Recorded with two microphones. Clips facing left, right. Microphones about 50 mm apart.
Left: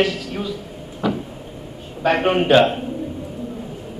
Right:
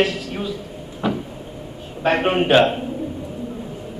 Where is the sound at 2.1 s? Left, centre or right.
Centre.